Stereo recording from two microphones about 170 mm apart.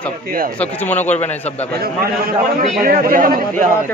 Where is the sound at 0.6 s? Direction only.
10° left (ahead or behind).